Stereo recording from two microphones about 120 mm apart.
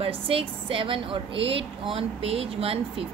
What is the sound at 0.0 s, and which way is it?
A woman's voice, 50° right (ahead or behind).